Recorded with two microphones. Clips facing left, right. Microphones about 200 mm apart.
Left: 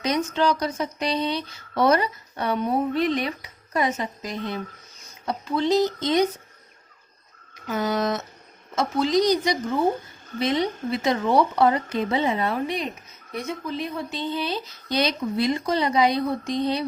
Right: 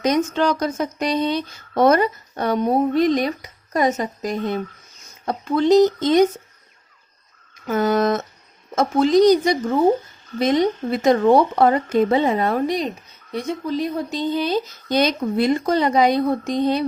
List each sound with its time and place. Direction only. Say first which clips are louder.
0.0 s speech: right 4 dB; 50° right (ahead or behind)
7.7 s speech: right 6 dB; 50° right (ahead or behind)